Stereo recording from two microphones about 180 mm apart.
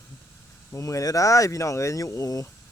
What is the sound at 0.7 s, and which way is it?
Speech, 15° left (ahead or behind).